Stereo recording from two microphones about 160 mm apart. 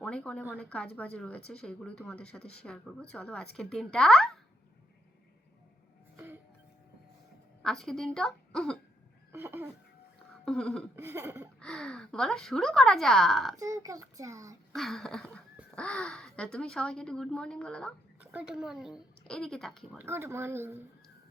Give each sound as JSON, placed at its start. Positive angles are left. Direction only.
{"t": 0.0, "sound": "a woman's voice", "side_deg": 5}
{"t": 6.1, "sound": "music", "side_deg": -15}
{"t": 7.6, "sound": "a woman's voice", "side_deg": 0}
{"t": 9.3, "sound": "speech", "side_deg": -15}
{"t": 10.4, "sound": "a woman's voice", "side_deg": 5}
{"t": 10.9, "sound": "speech", "side_deg": -15}
{"t": 11.6, "sound": "a woman's voice", "side_deg": 5}
{"t": 13.6, "sound": "a child's voice", "side_deg": -20}
{"t": 14.7, "sound": "a woman's voice", "side_deg": 0}
{"t": 18.2, "sound": "a woman's voice", "side_deg": -10}
{"t": 20.0, "sound": "speech", "side_deg": -15}